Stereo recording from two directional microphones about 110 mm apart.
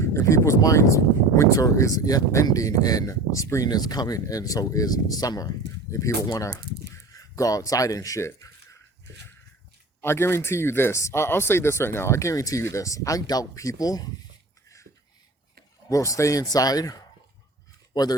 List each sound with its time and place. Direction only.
0.0 s speech: 25° left (ahead or behind)
10.0 s speech: 20° left (ahead or behind)
15.9 s speech: 30° left (ahead or behind)